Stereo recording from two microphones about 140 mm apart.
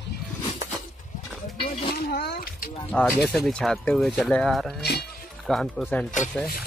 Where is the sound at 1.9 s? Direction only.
90° left.